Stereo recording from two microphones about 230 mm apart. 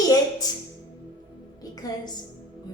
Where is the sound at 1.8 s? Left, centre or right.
Centre.